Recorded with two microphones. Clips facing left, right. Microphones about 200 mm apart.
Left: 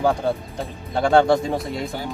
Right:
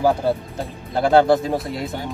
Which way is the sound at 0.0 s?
5° right (ahead or behind).